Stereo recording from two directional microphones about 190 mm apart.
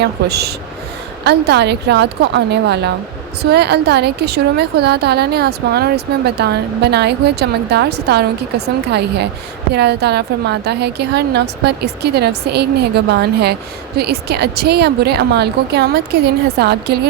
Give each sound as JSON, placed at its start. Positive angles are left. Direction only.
{"t": 0.0, "sound": "a woman's voice", "side_deg": -60}